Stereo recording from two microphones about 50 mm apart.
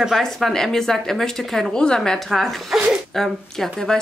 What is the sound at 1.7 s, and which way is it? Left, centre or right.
A woman's voice, centre.